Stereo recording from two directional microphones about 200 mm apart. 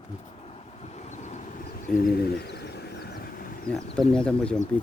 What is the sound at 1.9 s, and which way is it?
Vehicle, 50° left (ahead or behind).